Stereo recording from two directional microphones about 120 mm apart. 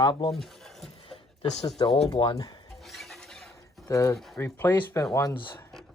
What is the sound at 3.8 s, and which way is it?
Speech, 25° left (ahead or behind).